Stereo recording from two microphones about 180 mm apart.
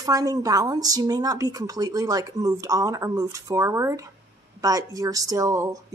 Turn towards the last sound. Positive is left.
turn(degrees=-20)  # may be behind; listen again after turning